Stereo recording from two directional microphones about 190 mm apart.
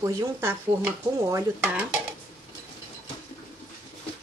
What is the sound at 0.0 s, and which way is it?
Speech, 15° right (ahead or behind).